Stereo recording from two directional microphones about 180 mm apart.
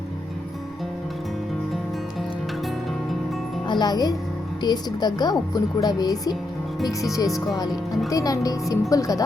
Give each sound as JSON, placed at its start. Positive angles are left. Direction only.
{"t": 3.7, "sound": "a woman's voice", "side_deg": 20}